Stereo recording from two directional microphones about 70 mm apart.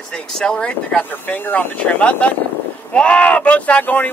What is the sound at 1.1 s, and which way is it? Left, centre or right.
Speech, left.